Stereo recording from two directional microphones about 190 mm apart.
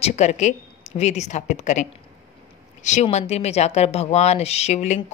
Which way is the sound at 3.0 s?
35° left (ahead or behind).